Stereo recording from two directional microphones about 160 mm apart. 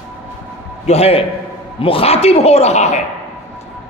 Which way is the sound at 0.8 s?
40° left (ahead or behind).